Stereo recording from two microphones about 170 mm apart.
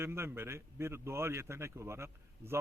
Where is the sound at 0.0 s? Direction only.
15° right (ahead or behind).